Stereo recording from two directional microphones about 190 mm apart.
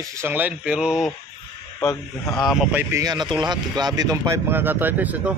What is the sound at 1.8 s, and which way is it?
Speech, 15° left (ahead or behind).